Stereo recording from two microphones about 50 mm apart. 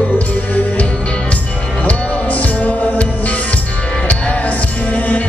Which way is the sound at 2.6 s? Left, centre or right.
Left.